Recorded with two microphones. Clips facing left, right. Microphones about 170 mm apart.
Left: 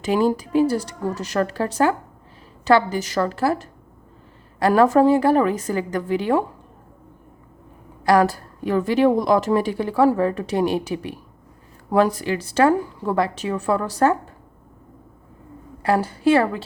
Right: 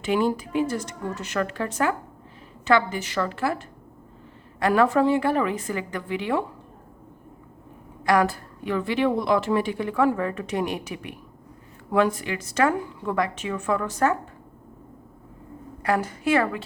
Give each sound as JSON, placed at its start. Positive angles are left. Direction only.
{"t": 0.0, "sound": "a woman's voice", "side_deg": 40}
{"t": 8.0, "sound": "a woman's voice", "side_deg": 35}
{"t": 15.8, "sound": "a woman's voice", "side_deg": 30}